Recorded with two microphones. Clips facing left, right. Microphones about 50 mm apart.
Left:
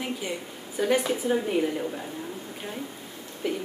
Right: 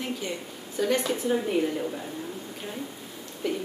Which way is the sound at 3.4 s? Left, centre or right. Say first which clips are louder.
Even; centre.